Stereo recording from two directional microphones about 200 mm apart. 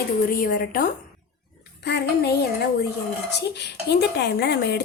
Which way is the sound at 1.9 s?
55° left (ahead or behind).